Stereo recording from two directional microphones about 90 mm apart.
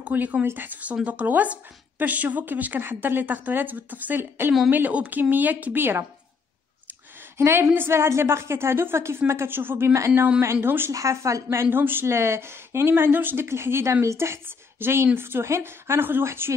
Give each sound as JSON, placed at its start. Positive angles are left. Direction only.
{"t": 0.0, "sound": "speech", "side_deg": -20}
{"t": 7.3, "sound": "speech", "side_deg": -30}
{"t": 10.9, "sound": "speech", "side_deg": -35}
{"t": 11.5, "sound": "a woman's voice", "side_deg": -25}